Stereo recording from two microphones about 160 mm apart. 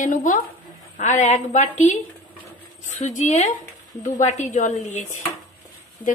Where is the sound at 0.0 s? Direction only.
55° left (ahead or behind).